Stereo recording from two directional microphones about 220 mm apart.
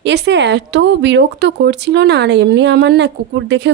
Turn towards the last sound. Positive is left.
turn(degrees=-50)  # may be behind; listen again after turning